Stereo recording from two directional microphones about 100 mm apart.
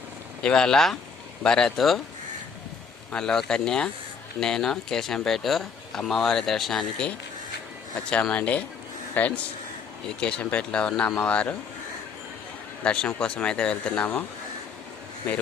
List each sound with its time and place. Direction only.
0.4 s speech: 5° left (ahead or behind)
3.1 s speech: 5° left (ahead or behind)
12.8 s speech: 10° left (ahead or behind)